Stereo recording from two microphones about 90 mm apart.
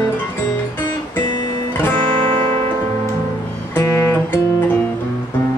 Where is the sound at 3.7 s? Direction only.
30° left (ahead or behind).